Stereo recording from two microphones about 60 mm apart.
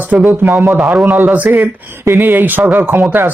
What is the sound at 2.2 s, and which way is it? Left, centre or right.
Speech, right.